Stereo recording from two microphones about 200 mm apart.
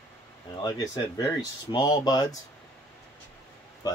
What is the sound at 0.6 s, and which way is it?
Speech, 20° left (ahead or behind).